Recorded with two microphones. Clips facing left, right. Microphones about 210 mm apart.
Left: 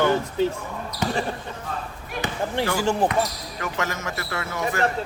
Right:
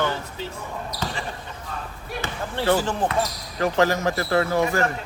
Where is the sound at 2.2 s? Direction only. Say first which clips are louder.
Even; 10° left (ahead or behind).